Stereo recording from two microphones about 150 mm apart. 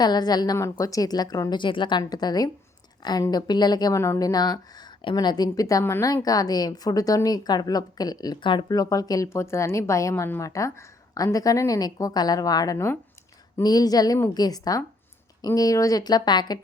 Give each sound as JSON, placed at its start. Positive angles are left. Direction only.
{"t": 0.0, "sound": "speech", "side_deg": 30}